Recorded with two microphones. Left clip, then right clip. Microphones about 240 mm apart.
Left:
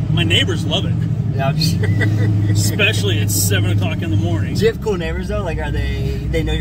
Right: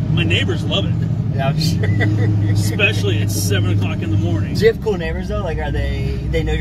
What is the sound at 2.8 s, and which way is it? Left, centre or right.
Speech, left.